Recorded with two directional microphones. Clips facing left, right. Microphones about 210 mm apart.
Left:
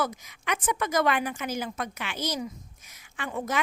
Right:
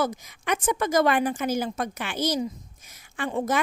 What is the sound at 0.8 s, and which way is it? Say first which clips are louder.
A woman's voice: right 4 dB; 45° right (ahead or behind).